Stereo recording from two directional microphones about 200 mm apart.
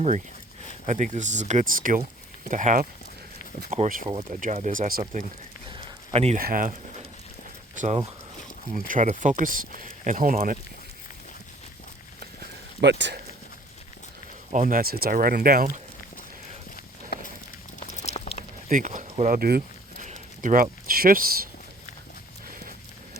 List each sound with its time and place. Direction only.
0.9 s speech: 35° right (ahead or behind)
5.7 s a sound: 25° right (ahead or behind)
6.4 s speech: 45° right (ahead or behind)
7.8 s speech: 35° right (ahead or behind)
12.8 s speech: 60° right (ahead or behind)
14.5 s speech: 45° right (ahead or behind)
16.7 s walk: 45° left (ahead or behind)
17.7 s a sound: 35° left (ahead or behind)
18.7 s speech: 40° right (ahead or behind)
19.1 s a sound: 40° right (ahead or behind)
20.1 s speech: 40° right (ahead or behind)